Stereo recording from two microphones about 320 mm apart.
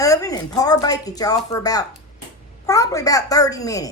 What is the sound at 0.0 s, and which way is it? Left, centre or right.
Speech, centre.